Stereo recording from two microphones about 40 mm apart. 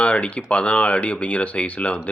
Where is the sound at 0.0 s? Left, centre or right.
Left.